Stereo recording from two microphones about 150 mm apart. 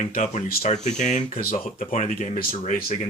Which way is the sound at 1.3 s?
70° left (ahead or behind).